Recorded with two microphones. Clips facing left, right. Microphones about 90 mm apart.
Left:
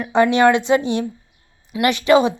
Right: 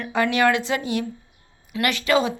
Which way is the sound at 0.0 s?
25° left (ahead or behind).